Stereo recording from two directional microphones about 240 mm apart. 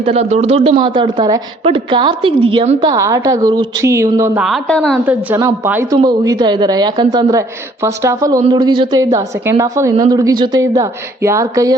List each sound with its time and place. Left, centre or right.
0.0 s a woman's voice: right
4.4 s a woman's voice: centre